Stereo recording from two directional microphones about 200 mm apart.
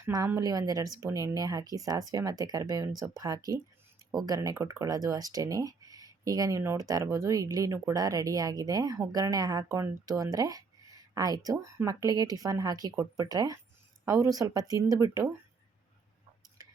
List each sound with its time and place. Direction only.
0.0 s speech: 15° right (ahead or behind)